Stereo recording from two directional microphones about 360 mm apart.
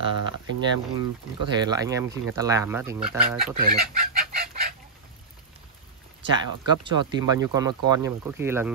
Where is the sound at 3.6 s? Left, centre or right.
Right.